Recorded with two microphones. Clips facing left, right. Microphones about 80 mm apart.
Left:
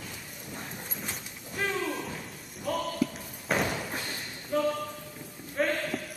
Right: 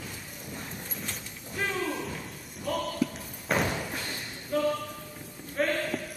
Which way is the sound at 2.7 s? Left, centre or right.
Centre.